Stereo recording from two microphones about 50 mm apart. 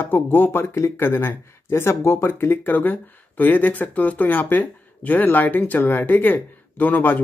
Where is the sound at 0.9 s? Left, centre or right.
Left.